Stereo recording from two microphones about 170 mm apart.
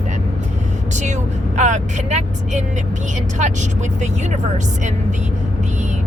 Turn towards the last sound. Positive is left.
turn(degrees=-45)  # may be behind; listen again after turning